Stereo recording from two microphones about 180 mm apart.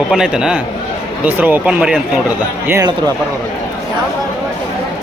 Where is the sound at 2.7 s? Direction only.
20° right (ahead or behind).